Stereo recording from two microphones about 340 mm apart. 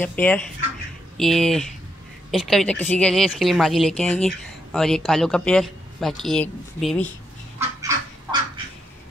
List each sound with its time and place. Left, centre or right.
0.0 s speech: centre
7.5 s goose: centre